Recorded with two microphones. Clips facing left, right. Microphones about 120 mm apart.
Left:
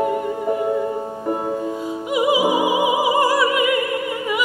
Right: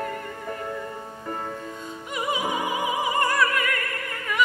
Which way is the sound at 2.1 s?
10° left (ahead or behind).